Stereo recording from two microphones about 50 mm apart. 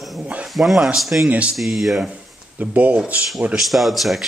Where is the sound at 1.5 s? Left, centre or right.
Centre.